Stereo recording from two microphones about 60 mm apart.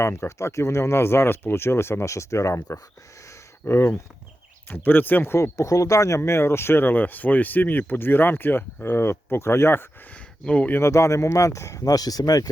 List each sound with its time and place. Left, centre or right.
0.0 s speech: left
3.2 s a sound: left
4.7 s speech: left
5.5 s speech: left
10.1 s speech: centre
10.8 s speech: left